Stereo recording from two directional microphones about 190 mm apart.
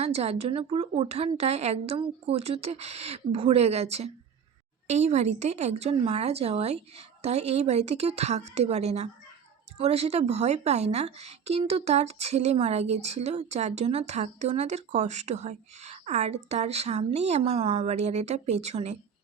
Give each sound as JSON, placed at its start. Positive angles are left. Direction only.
{"t": 0.0, "sound": "speech", "side_deg": -35}